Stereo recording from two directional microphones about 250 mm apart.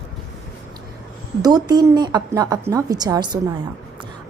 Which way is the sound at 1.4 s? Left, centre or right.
Centre.